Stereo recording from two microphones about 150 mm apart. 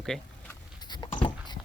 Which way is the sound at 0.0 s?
5° left (ahead or behind).